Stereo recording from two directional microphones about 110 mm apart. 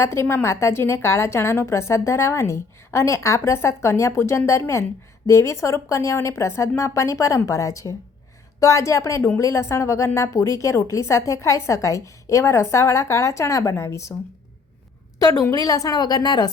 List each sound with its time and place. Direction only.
0.0 s a woman's voice: 25° left (ahead or behind)
15.2 s a woman's voice: 35° left (ahead or behind)